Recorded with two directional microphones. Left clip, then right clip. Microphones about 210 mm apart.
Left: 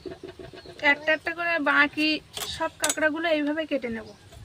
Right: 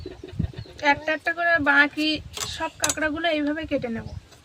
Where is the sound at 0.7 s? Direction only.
15° right (ahead or behind).